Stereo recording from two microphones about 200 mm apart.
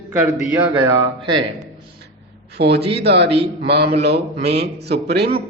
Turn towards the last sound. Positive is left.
turn(degrees=-55)  # may be behind; listen again after turning